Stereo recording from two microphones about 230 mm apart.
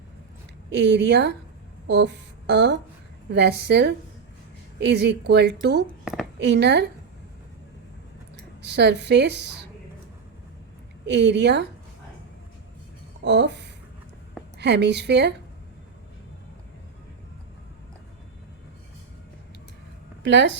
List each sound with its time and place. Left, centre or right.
0.7 s a woman's voice: right
8.6 s a woman's voice: right
11.1 s a woman's voice: right
13.2 s a woman's voice: right
20.2 s a woman's voice: right